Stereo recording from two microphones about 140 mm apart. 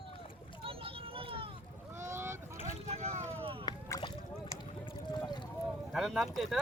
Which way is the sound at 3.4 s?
40° right (ahead or behind).